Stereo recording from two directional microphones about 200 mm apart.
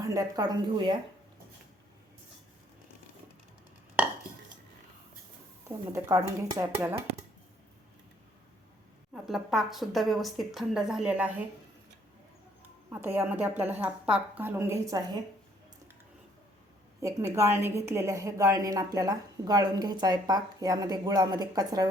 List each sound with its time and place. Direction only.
0.0 s speech: 15° right (ahead or behind)
5.6 s a woman's voice: 15° right (ahead or behind)
9.1 s a woman's voice: centre (ahead or behind)
12.9 s a woman's voice: 10° right (ahead or behind)
17.0 s a woman's voice: 15° right (ahead or behind)